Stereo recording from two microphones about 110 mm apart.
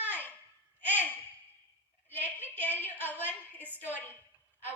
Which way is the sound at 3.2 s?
15° right (ahead or behind).